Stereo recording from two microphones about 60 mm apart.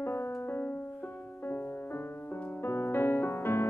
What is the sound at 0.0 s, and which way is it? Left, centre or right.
Music, left.